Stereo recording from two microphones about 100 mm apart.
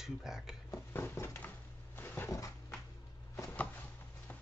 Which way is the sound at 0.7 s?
25° left (ahead or behind).